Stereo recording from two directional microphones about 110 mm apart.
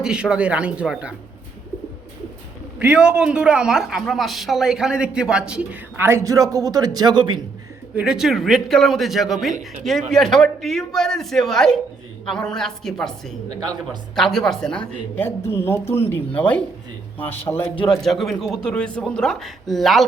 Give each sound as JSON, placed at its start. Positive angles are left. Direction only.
{"t": 0.0, "sound": "a man's voice", "side_deg": -5}
{"t": 2.7, "sound": "a man's voice", "side_deg": -10}
{"t": 6.0, "sound": "speech", "side_deg": -25}
{"t": 7.9, "sound": "a man's voice", "side_deg": -5}
{"t": 18.0, "sound": "a man's voice", "side_deg": 0}